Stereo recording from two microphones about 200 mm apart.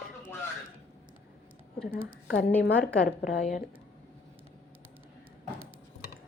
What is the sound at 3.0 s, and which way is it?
Speech, 40° left (ahead or behind).